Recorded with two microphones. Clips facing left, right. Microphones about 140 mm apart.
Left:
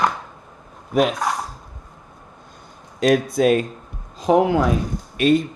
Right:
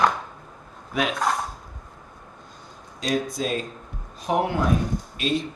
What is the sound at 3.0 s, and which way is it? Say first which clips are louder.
Speech: left 9 dB; 60° left (ahead or behind).